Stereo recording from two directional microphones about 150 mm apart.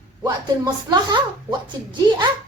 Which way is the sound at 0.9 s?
30° right (ahead or behind).